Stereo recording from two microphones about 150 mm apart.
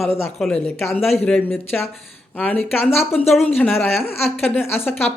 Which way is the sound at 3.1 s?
40° left (ahead or behind).